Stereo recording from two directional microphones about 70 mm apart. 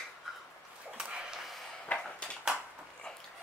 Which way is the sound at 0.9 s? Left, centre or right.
Centre.